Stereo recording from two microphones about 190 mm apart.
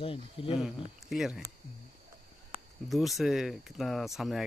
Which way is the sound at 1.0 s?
Centre (ahead or behind).